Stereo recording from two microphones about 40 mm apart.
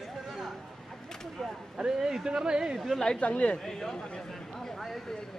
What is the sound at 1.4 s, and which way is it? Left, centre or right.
Speech, centre.